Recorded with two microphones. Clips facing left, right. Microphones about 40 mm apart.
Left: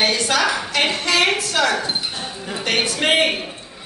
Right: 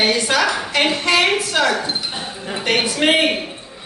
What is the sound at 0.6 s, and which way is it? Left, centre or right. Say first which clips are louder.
A woman's voice: right 2 dB; centre.